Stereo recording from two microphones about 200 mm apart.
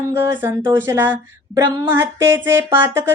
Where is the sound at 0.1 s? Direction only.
10° right (ahead or behind).